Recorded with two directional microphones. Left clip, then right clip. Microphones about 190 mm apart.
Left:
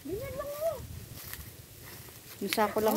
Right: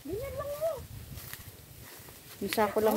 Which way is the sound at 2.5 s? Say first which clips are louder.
Right 1 dB; 5° left (ahead or behind).